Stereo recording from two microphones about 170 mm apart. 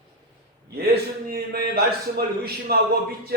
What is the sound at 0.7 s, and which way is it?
A man's voice, 65° right (ahead or behind).